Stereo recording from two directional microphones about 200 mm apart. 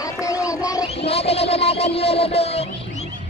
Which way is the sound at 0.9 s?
30° left (ahead or behind).